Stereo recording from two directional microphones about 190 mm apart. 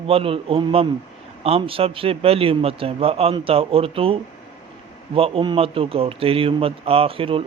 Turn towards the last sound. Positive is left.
turn(degrees=-30)  # may be behind; listen again after turning